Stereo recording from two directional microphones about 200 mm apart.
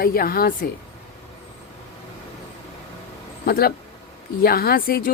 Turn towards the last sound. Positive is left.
turn(degrees=50)  # may be behind; listen again after turning